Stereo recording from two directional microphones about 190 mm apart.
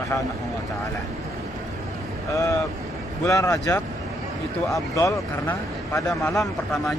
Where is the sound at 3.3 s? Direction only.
15° left (ahead or behind).